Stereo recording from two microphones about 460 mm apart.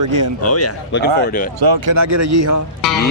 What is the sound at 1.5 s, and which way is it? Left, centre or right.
Speech, right.